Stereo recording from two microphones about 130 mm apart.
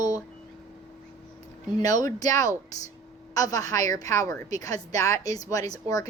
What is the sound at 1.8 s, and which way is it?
A woman's voice, 25° left (ahead or behind).